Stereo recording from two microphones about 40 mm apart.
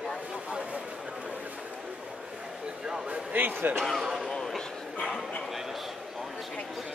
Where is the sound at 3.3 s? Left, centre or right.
Right.